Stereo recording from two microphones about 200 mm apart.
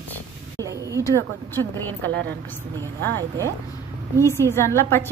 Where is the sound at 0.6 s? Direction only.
15° right (ahead or behind).